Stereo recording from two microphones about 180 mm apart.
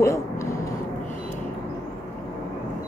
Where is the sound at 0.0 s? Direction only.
15° left (ahead or behind).